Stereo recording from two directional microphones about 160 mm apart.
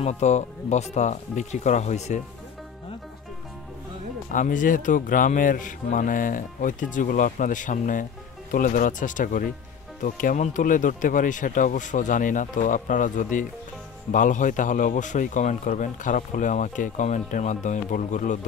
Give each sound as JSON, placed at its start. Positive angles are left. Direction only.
{"t": 0.0, "sound": "speech", "side_deg": 45}
{"t": 4.3, "sound": "speech", "side_deg": 55}